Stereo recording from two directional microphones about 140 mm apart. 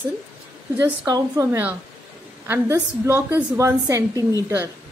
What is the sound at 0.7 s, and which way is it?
A woman's voice, 25° right (ahead or behind).